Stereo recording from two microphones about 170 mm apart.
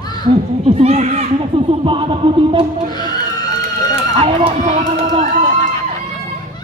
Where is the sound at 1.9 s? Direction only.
30° right (ahead or behind).